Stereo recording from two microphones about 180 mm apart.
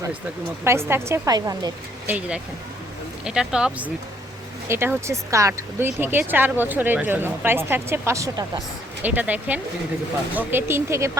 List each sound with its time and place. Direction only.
0.6 s speech: 15° right (ahead or behind)
2.0 s speech: 10° right (ahead or behind)